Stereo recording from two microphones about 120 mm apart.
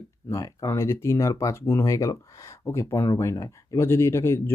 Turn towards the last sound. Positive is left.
turn(degrees=20)  # may be behind; listen again after turning